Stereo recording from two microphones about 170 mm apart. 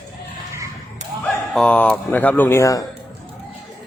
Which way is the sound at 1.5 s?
5° left (ahead or behind).